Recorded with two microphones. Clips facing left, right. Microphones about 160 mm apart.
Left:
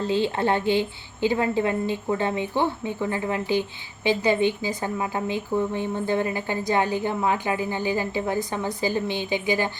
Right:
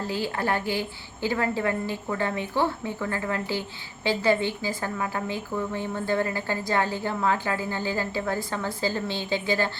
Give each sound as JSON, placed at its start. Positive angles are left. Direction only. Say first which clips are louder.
{"t": 0.0, "sound": "a woman's voice", "louder": "left 5 dB", "side_deg": 25}